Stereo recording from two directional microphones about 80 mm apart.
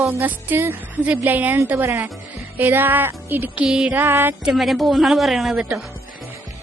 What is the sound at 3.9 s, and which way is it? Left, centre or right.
Music, right.